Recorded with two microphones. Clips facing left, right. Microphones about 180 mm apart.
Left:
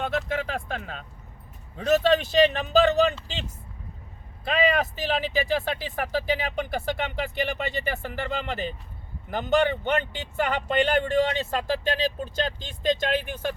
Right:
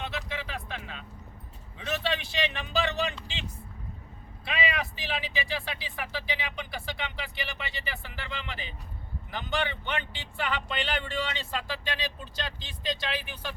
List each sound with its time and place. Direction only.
0.0 s music: 50° left (ahead or behind)
1.7 s speech: 45° left (ahead or behind)
4.4 s speech: 45° left (ahead or behind)